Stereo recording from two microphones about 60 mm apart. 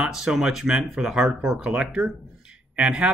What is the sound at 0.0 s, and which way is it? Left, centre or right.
Speech, centre.